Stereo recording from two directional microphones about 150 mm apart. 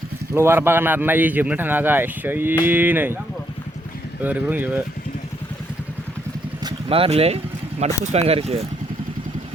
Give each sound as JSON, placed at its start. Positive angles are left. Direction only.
{"t": 0.3, "sound": "a man's voice", "side_deg": -15}
{"t": 4.2, "sound": "a man's voice", "side_deg": -10}
{"t": 6.8, "sound": "speech", "side_deg": -40}